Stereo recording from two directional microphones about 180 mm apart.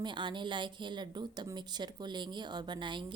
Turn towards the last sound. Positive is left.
turn(degrees=-25)  # may be behind; listen again after turning